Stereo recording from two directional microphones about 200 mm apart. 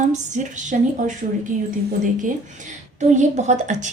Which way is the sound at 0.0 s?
35° right (ahead or behind).